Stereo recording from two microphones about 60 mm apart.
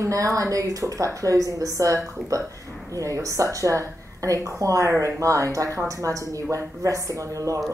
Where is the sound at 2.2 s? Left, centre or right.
Centre.